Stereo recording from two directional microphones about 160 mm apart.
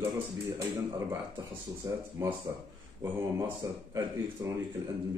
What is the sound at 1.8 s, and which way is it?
Speech, 20° right (ahead or behind).